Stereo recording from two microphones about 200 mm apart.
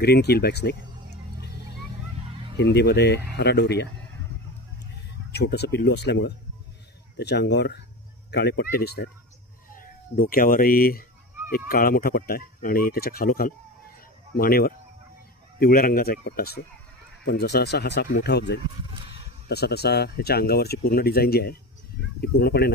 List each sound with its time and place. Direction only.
0.0 s music: 55° left (ahead or behind)
2.5 s speech: 60° left (ahead or behind)
5.3 s speech: 55° left (ahead or behind)